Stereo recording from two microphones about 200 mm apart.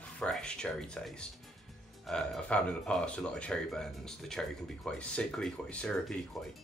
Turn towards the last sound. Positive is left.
turn(degrees=0)  # may be behind; listen again after turning